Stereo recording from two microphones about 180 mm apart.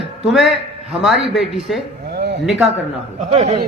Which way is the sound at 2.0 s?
65° right (ahead or behind).